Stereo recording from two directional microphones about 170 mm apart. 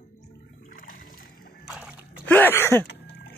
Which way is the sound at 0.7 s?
55° left (ahead or behind).